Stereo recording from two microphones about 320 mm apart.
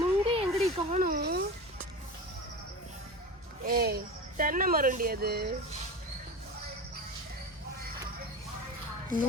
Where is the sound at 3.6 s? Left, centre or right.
Right.